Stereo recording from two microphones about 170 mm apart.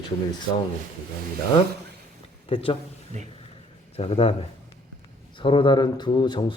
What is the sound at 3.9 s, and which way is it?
A man's voice, 35° left (ahead or behind).